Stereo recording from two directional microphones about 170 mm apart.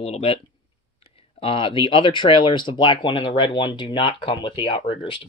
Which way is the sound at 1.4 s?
30° left (ahead or behind).